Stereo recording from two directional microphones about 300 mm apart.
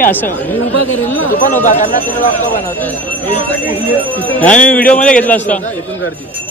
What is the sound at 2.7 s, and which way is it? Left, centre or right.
Speech, centre.